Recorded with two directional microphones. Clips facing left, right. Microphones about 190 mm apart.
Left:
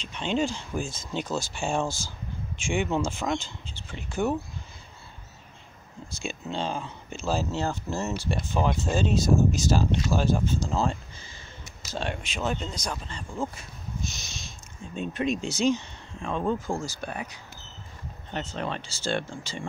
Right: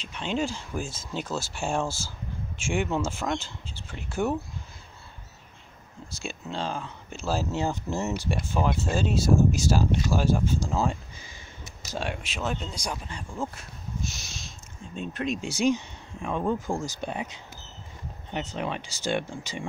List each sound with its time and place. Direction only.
0.0 s speech: 5° right (ahead or behind)
6.0 s speech: centre (ahead or behind); by 8.4 s 20° right (ahead or behind)
8.5 s speech: 5° right (ahead or behind)
13.6 s a sound: 5° right (ahead or behind)
15.0 s speech: centre (ahead or behind)
15.5 s speech: 15° right (ahead or behind)